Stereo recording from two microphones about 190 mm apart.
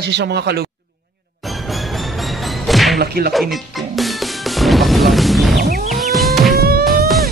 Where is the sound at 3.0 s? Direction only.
55° right (ahead or behind).